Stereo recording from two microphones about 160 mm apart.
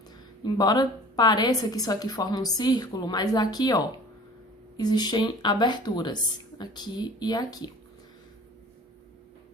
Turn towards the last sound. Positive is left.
turn(degrees=25)  # may be behind; listen again after turning